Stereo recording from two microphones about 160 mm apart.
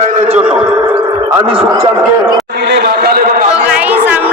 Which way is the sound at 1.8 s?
15° right (ahead or behind).